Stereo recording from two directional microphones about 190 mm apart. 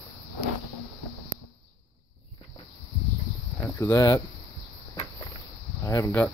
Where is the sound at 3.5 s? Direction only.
15° left (ahead or behind).